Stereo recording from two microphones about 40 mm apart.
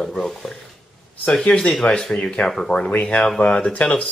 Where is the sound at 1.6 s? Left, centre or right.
Centre; by 4.1 s left.